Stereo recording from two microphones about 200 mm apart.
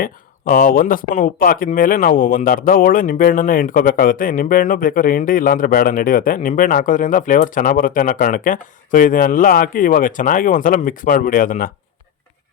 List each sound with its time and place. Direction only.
0.0 s speech: 45° left (ahead or behind)